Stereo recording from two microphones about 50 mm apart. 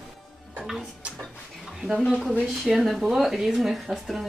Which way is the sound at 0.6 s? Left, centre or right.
Centre.